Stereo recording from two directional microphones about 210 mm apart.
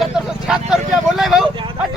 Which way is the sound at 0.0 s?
Centre (ahead or behind).